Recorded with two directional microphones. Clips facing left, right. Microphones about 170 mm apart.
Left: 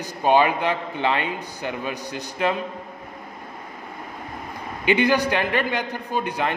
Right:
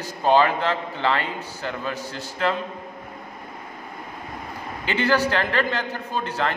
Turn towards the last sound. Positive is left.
turn(degrees=15)  # may be behind; listen again after turning